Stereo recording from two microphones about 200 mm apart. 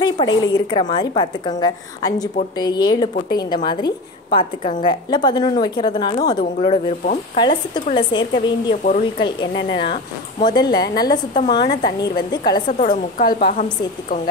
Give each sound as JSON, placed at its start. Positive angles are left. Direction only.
{"t": 0.0, "sound": "speech", "side_deg": 20}
{"t": 6.4, "sound": "speech", "side_deg": 35}
{"t": 12.6, "sound": "a woman's voice", "side_deg": 40}